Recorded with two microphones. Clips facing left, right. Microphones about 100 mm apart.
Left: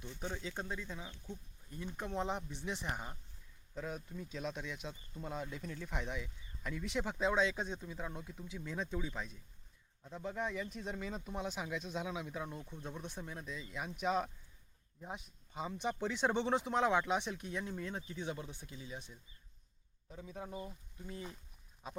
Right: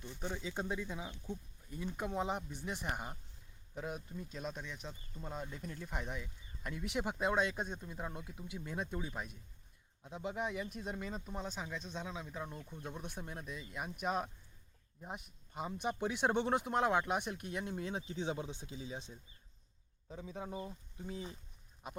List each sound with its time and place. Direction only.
0.3 s speech: 5° right (ahead or behind)
18.1 s speech: 25° right (ahead or behind)